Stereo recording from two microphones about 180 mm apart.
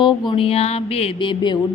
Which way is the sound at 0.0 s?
25° left (ahead or behind).